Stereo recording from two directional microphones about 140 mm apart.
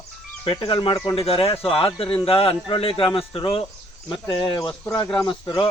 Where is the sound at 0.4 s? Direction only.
40° left (ahead or behind).